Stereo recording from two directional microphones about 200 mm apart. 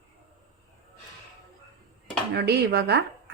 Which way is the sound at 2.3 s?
55° right (ahead or behind).